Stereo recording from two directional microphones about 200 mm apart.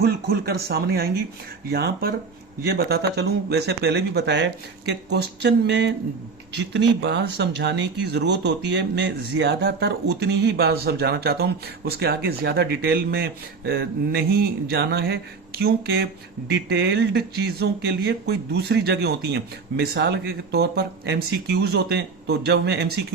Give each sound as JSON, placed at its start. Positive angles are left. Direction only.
{"t": 0.0, "sound": "speech", "side_deg": -50}